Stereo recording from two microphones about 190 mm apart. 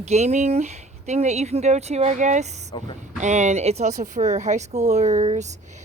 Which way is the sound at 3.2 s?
40° right (ahead or behind).